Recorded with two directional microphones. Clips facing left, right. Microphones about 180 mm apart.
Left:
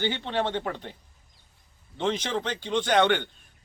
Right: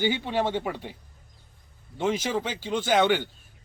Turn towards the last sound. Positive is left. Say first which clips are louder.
# even
turn(degrees=-5)  # may be behind; listen again after turning